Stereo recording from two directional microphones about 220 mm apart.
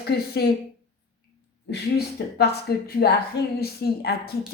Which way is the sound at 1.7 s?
45° left (ahead or behind).